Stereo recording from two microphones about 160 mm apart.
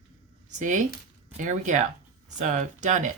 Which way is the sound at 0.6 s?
50° right (ahead or behind).